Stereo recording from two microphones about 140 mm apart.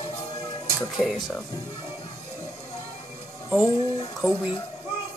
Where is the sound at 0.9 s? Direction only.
Centre (ahead or behind).